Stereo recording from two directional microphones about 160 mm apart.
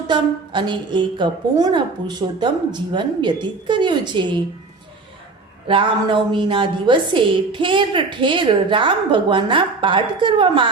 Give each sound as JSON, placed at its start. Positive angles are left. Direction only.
{"t": 0.1, "sound": "a woman's voice", "side_deg": -30}
{"t": 5.6, "sound": "a woman's voice", "side_deg": -30}